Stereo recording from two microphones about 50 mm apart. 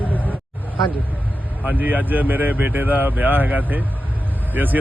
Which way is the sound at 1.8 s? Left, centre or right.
Right.